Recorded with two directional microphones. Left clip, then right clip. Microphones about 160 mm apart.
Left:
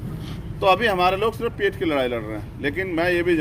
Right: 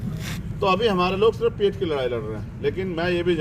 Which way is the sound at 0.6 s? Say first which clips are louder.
Left 2 dB; 45° left (ahead or behind).